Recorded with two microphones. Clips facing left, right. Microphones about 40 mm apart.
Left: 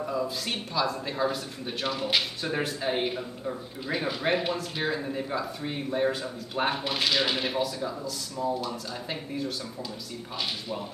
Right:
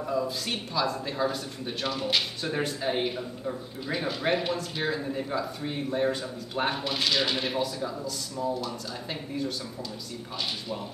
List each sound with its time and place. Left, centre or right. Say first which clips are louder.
0.0 s speech: right 1 dB; centre